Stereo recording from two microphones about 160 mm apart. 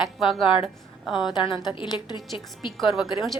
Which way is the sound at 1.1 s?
5° right (ahead or behind).